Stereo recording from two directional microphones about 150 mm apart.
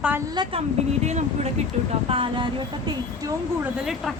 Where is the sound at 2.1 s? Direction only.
35° right (ahead or behind).